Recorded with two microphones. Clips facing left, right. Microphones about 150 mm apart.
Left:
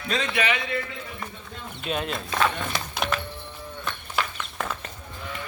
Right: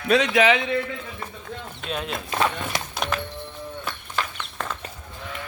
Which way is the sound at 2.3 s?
15° right (ahead or behind).